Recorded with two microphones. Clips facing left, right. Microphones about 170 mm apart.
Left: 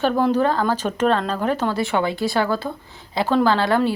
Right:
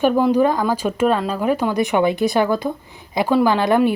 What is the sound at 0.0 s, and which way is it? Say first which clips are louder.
Speech: right 3 dB; 10° right (ahead or behind).